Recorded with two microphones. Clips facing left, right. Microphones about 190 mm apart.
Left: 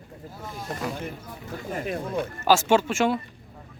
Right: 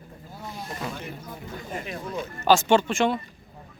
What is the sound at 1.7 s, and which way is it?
Speech, 50° left (ahead or behind).